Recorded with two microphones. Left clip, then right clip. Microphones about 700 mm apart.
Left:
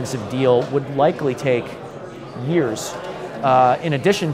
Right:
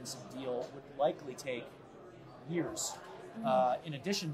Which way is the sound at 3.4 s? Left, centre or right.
Left.